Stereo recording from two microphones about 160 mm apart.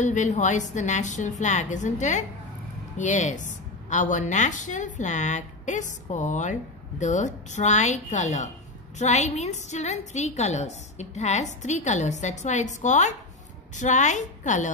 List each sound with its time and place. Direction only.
0.0 s a woman's voice: 50° left (ahead or behind)